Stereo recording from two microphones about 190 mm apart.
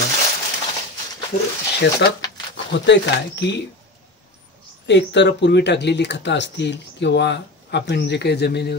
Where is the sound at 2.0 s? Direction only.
65° left (ahead or behind).